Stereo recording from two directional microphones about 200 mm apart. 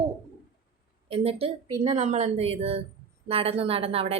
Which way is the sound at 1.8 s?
35° right (ahead or behind).